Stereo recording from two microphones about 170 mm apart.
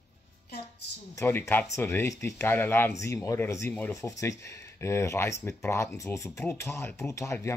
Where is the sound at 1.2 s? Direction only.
10° left (ahead or behind).